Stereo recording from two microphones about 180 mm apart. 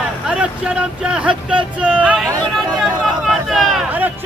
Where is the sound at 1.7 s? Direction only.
5° right (ahead or behind).